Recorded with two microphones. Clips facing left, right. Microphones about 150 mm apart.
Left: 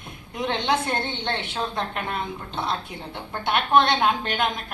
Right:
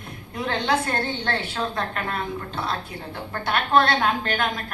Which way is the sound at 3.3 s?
20° left (ahead or behind).